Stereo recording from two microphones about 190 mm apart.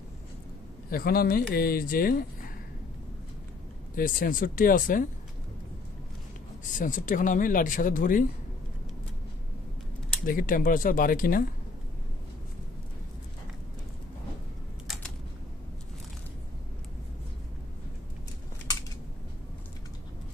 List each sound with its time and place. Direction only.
0.8 s speech: 50° left (ahead or behind)
3.9 s speech: 45° left (ahead or behind)
6.8 s speech: 45° left (ahead or behind)
10.2 s speech: 45° left (ahead or behind)